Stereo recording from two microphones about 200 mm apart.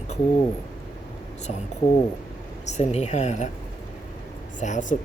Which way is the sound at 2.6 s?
35° left (ahead or behind).